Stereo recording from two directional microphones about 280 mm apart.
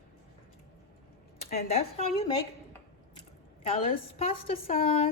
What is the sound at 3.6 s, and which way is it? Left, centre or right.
A woman's voice, left.